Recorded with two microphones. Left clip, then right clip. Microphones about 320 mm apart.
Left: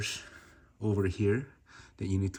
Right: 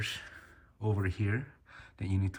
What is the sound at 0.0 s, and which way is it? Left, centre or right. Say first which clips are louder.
Speech: left 1 dB; centre.